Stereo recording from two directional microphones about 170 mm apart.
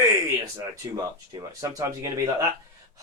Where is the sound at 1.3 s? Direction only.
20° right (ahead or behind).